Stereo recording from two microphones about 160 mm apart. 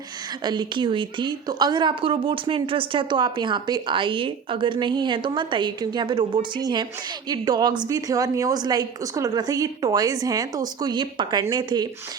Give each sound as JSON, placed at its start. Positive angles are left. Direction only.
{"t": 0.4, "sound": "a woman's voice", "side_deg": -30}